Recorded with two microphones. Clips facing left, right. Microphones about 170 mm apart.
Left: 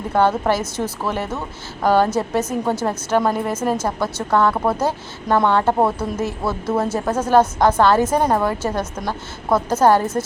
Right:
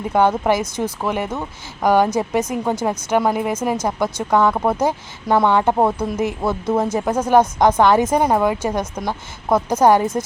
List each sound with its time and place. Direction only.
0.1 s a woman's voice: 15° right (ahead or behind)